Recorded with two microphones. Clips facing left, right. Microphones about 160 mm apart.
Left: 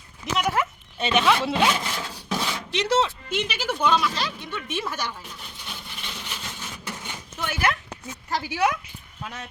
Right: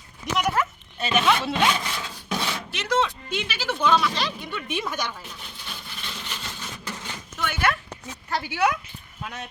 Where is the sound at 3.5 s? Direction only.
15° left (ahead or behind).